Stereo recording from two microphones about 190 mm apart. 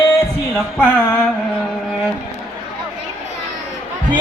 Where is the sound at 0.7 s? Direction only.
10° left (ahead or behind).